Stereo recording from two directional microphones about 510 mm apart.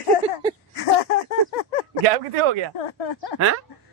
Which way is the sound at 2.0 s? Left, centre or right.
Right.